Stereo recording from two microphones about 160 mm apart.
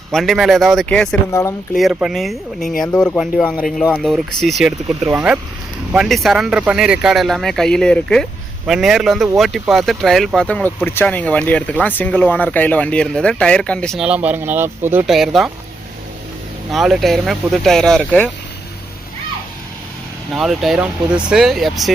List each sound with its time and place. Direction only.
0.1 s speech: centre (ahead or behind)
1.3 s speech: 20° left (ahead or behind)
1.7 s speech: 5° right (ahead or behind)
15.0 s speech: centre (ahead or behind)
16.7 s speech: centre (ahead or behind)
20.3 s speech: centre (ahead or behind)